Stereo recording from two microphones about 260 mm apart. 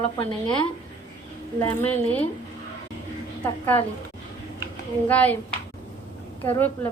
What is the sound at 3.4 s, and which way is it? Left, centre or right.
Speech, centre.